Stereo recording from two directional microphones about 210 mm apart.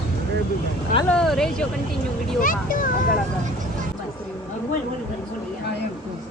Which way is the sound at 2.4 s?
40° left (ahead or behind).